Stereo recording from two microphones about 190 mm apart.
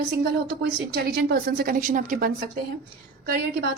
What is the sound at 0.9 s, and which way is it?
A woman's voice, 55° right (ahead or behind).